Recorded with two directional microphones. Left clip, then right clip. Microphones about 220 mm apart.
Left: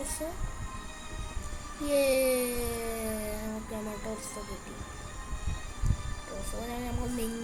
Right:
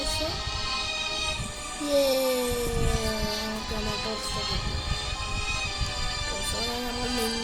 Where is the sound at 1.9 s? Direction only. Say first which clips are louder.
Right 2 dB; 10° left (ahead or behind).